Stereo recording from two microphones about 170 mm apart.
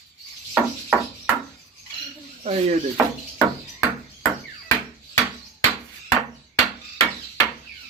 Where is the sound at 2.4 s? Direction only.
40° right (ahead or behind).